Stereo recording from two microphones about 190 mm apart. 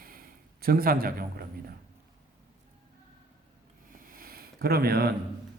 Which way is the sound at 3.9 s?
50° right (ahead or behind).